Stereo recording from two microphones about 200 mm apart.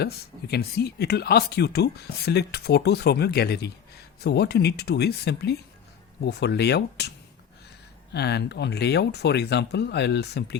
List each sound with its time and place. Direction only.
0.0 s speech: 55° left (ahead or behind)
8.1 s speech: 55° left (ahead or behind)